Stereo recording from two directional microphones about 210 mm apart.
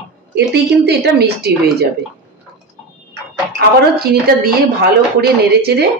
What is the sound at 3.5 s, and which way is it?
Speech, 45° right (ahead or behind).